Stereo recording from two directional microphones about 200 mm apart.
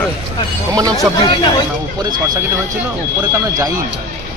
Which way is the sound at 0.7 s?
15° right (ahead or behind).